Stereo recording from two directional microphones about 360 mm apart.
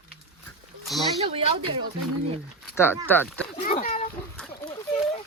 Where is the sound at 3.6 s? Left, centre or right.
Left.